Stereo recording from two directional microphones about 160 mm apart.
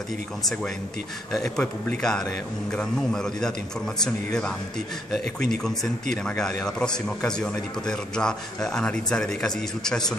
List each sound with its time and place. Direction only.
1.6 s a man's voice: 5° left (ahead or behind)
5.2 s speech: 50° right (ahead or behind)
6.2 s a man's voice: 5° left (ahead or behind)